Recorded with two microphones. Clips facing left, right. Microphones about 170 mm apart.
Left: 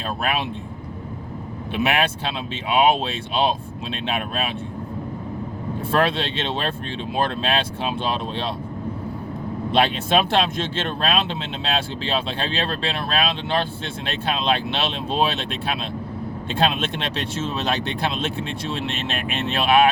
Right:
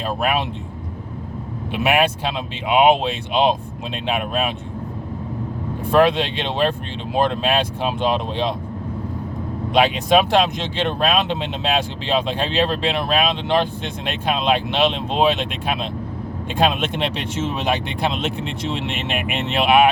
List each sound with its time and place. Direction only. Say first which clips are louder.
1.7 s speech: right 3 dB; 15° right (ahead or behind)
5.9 s speech: right 6 dB; 15° right (ahead or behind)
9.7 s speech: right 4 dB; 10° right (ahead or behind)